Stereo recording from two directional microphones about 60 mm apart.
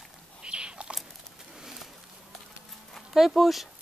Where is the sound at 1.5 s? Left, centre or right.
Centre.